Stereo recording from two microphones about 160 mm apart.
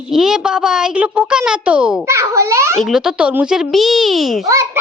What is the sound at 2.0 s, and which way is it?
Speech, 15° right (ahead or behind).